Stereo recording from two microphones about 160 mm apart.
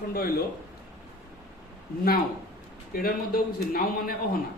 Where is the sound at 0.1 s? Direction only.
75° left (ahead or behind).